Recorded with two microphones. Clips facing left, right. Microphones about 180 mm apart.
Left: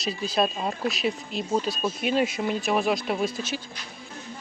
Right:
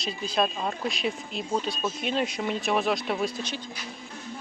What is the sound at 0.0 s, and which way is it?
Speech, 5° left (ahead or behind).